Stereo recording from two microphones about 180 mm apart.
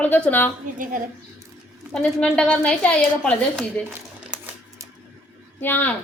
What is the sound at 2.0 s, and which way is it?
A woman's voice, 5° left (ahead or behind).